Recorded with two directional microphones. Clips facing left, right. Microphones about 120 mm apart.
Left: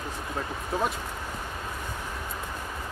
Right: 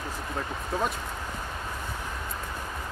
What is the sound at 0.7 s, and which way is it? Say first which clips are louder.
Speech: left 1 dB; 10° left (ahead or behind).